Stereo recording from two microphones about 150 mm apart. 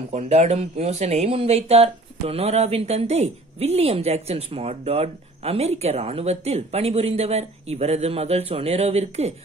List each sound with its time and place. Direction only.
0.1 s speech: 45° right (ahead or behind)